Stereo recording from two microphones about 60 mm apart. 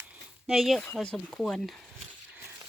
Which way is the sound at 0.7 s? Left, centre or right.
Centre.